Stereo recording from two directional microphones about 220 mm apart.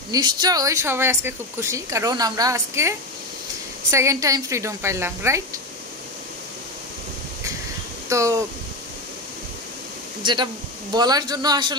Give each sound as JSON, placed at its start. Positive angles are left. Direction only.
{"t": 0.1, "sound": "a woman's voice", "side_deg": -20}
{"t": 8.1, "sound": "speech", "side_deg": -15}
{"t": 10.2, "sound": "a man's voice", "side_deg": -20}